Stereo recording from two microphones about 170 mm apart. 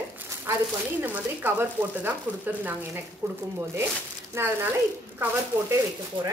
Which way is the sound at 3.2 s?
15° right (ahead or behind).